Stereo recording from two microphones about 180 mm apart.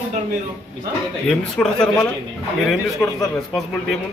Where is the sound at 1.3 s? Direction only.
5° left (ahead or behind).